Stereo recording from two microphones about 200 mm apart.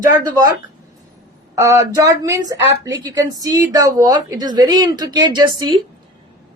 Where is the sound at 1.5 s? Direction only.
15° right (ahead or behind).